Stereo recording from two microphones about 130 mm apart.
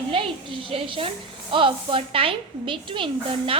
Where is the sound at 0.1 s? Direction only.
45° right (ahead or behind).